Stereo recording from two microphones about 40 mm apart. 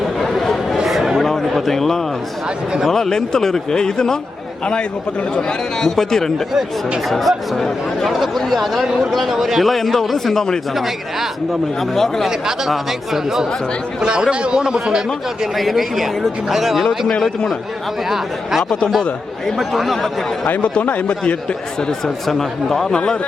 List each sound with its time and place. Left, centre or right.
0.2 s a sound: centre
2.9 s speech: centre
10.8 s speech: centre
11.8 s speech: centre
12.5 s speech: centre
14.0 s a man's voice: right
15.5 s speech: centre
17.1 s speech: centre
19.5 s speech: centre
20.8 s a man's voice: left
21.8 s speech: centre
22.3 s speech: centre